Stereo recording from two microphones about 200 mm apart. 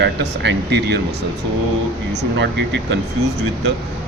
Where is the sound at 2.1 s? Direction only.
60° right (ahead or behind).